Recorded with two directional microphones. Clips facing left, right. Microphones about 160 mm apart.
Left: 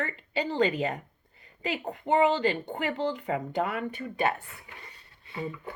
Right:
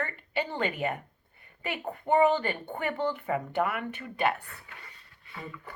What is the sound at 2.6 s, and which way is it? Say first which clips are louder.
Speech: left 1 dB; 20° left (ahead or behind).